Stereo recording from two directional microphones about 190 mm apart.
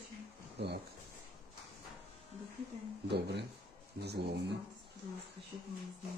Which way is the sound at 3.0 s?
60° right (ahead or behind).